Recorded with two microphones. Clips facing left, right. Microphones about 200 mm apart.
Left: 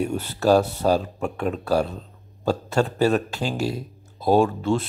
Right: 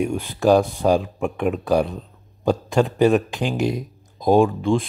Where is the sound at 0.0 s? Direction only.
10° right (ahead or behind).